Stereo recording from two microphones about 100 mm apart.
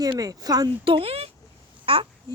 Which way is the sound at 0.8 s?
65° right (ahead or behind).